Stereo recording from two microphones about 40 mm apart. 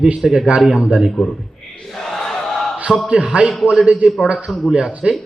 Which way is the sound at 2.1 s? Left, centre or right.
Centre.